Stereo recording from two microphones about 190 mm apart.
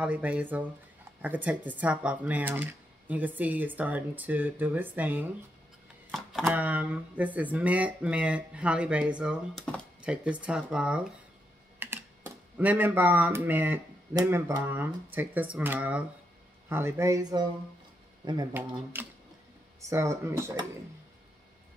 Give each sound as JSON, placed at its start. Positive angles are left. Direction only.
{"t": 0.0, "sound": "speech", "side_deg": -5}
{"t": 11.8, "sound": "typing", "side_deg": -10}
{"t": 12.5, "sound": "speech", "side_deg": -10}
{"t": 18.9, "sound": "speech", "side_deg": -10}